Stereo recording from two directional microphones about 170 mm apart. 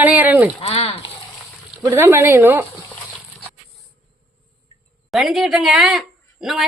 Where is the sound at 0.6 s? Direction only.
35° left (ahead or behind).